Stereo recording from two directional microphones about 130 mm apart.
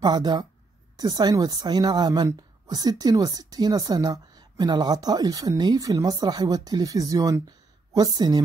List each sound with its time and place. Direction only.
0.0 s a woman's voice: 30° right (ahead or behind)